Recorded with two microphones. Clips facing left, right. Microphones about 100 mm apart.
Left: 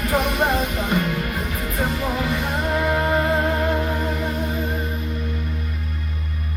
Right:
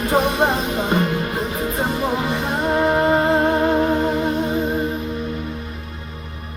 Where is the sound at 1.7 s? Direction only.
25° right (ahead or behind).